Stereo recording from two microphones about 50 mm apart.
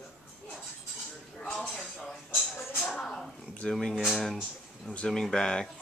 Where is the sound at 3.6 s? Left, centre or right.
Centre.